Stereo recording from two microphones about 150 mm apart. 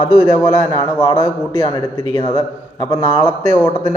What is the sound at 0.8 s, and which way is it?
A man's voice, 25° left (ahead or behind).